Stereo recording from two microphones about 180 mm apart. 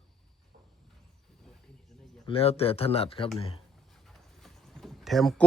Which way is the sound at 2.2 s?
30° left (ahead or behind).